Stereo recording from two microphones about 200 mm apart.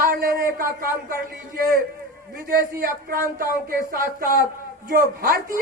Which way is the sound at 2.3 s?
45° right (ahead or behind).